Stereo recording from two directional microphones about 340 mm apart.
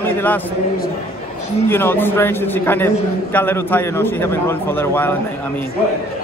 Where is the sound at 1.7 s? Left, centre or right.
Centre.